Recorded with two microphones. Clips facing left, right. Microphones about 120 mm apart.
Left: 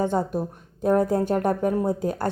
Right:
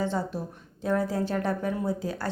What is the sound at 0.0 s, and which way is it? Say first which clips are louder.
Speech: left 5 dB; 50° left (ahead or behind).